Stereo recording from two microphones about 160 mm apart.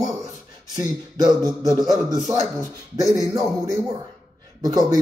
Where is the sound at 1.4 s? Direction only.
25° right (ahead or behind).